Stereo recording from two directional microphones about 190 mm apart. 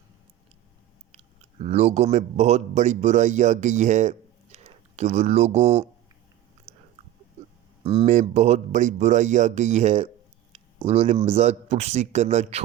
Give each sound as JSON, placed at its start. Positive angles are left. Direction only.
{"t": 1.1, "sound": "speech", "side_deg": -35}
{"t": 8.0, "sound": "speech", "side_deg": -40}